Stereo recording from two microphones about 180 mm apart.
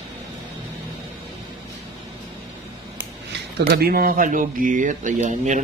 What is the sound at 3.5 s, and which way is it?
Speech, 60° right (ahead or behind).